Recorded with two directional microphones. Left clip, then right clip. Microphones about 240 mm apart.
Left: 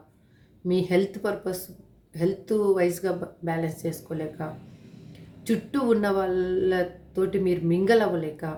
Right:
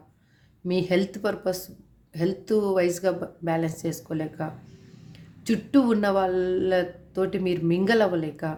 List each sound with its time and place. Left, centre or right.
0.7 s speech: right